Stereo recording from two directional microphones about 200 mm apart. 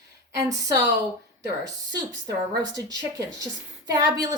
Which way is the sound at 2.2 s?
20° right (ahead or behind).